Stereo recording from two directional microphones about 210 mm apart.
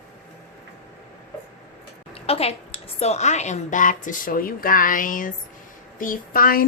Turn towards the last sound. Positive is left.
turn(degrees=45)  # may be behind; listen again after turning